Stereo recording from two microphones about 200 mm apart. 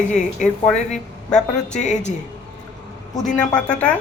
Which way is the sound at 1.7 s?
35° left (ahead or behind).